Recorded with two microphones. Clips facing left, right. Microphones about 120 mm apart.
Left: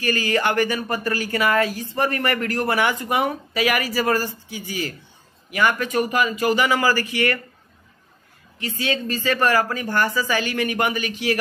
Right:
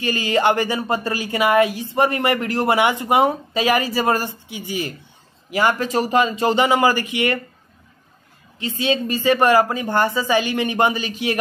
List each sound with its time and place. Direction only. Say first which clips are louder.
0.0 s speech: right 3 dB; 20° right (ahead or behind)
8.5 s speech: right 4 dB; 20° right (ahead or behind)